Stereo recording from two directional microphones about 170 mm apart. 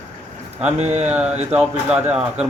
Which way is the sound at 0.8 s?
40° right (ahead or behind).